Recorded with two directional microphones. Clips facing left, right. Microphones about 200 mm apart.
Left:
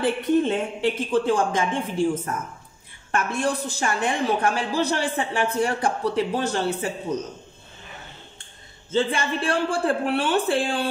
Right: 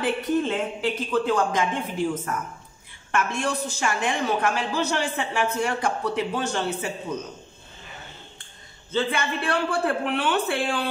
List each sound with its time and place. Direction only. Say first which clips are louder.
0.0 s a woman's voice: left 3 dB; 30° left (ahead or behind)
8.9 s a woman's voice: left 2 dB; 30° left (ahead or behind)